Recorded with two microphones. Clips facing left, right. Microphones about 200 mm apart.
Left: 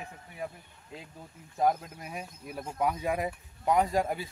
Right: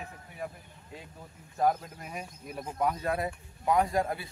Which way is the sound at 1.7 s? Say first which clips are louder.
Even; centre (ahead or behind).